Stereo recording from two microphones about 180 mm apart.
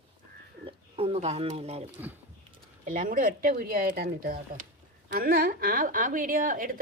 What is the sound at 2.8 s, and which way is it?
A woman's voice, 45° right (ahead or behind).